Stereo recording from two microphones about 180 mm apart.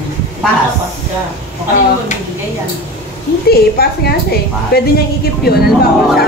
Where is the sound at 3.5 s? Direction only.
60° left (ahead or behind).